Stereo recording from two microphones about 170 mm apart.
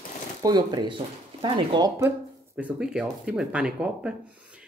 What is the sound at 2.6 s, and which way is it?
Speech, 5° right (ahead or behind).